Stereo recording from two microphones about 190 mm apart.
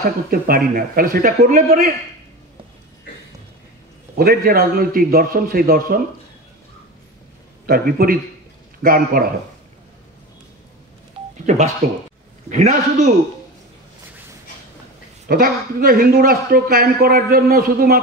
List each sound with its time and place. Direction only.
0.3 s a man's voice: 50° right (ahead or behind)
4.2 s a man's voice: 50° right (ahead or behind)
7.6 s a man's voice: 50° right (ahead or behind)
11.4 s a man's voice: 40° right (ahead or behind)
15.2 s a man's voice: 50° right (ahead or behind)